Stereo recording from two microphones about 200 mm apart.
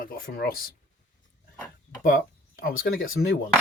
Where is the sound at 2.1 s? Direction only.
45° left (ahead or behind).